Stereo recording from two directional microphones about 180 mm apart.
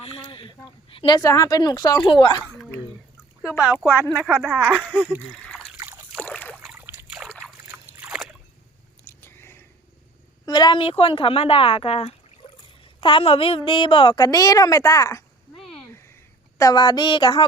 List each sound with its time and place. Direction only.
0.2 s a woman's voice: 30° left (ahead or behind)
4.1 s a woman's voice: 5° right (ahead or behind)
5.3 s trickle: 5° left (ahead or behind)
5.7 s a sound: 15° right (ahead or behind)
6.1 s rowboat: 5° left (ahead or behind)
6.6 s a sound: 10° right (ahead or behind)
7.3 s a sound: 5° left (ahead or behind)
7.7 s boat: 10° right (ahead or behind)
9.2 s biting: 15° left (ahead or behind)
10.4 s a woman's voice: 25° left (ahead or behind)
15.5 s a sound: 5° left (ahead or behind)
16.6 s a woman's voice: 20° left (ahead or behind)